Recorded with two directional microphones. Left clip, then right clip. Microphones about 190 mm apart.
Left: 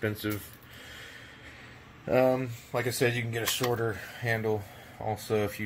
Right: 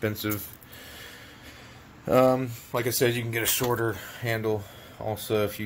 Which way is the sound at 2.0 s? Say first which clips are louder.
Right 4 dB; 20° right (ahead or behind).